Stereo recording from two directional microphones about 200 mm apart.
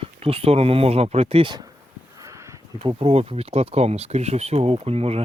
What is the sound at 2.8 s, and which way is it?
Speech, 25° right (ahead or behind).